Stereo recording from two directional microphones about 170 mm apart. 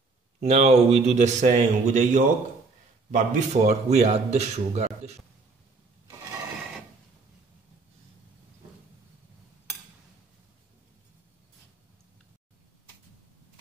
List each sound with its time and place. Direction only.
0.4 s a man's voice: 40° right (ahead or behind)